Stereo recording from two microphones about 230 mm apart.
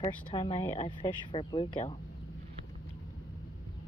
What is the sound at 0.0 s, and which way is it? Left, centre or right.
Speech, centre.